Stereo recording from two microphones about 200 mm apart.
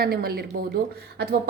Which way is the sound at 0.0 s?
50° right (ahead or behind).